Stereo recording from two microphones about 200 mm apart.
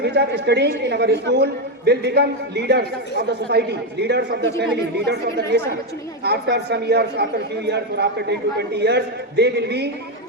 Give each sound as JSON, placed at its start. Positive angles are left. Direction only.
{"t": 0.0, "sound": "a man's voice", "side_deg": -55}